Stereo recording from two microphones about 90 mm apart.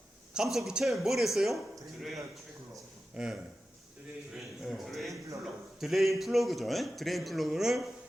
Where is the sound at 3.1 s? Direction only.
10° right (ahead or behind).